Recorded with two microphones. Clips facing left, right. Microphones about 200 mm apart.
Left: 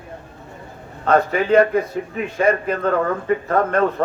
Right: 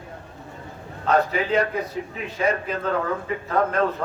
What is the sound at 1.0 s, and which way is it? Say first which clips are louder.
A man's voice: left 4 dB; 50° left (ahead or behind).